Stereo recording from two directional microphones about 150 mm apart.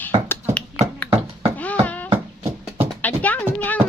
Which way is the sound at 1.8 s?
10° left (ahead or behind).